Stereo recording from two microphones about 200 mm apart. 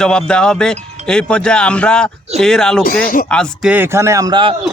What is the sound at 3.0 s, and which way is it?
Speech, 45° left (ahead or behind).